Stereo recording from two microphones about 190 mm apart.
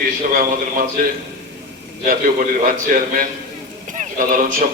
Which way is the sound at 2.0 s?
45° right (ahead or behind).